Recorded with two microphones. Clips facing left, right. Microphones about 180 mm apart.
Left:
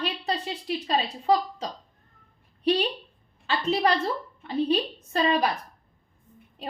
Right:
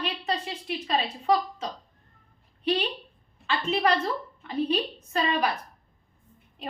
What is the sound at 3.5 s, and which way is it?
A woman's voice, 35° left (ahead or behind).